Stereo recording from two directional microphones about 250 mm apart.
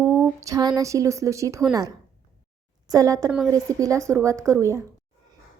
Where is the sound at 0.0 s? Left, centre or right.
Centre.